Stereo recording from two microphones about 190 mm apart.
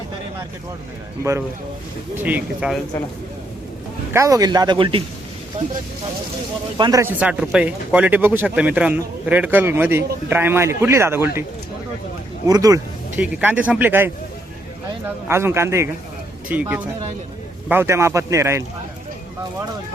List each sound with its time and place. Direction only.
2.1 s speech: 10° right (ahead or behind)
4.1 s speech: 15° right (ahead or behind)
6.7 s speech: 25° right (ahead or behind)
7.0 s speech: 5° right (ahead or behind)
12.5 s speech: 20° right (ahead or behind)
13.2 s speech: 10° right (ahead or behind)
15.3 s speech: 15° right (ahead or behind)